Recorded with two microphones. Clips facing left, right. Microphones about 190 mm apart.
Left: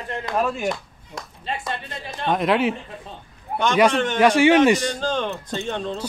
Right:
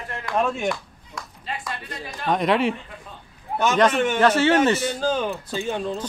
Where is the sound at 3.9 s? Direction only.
10° right (ahead or behind).